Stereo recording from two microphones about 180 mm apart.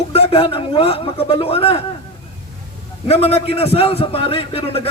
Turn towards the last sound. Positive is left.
turn(degrees=30)  # may be behind; listen again after turning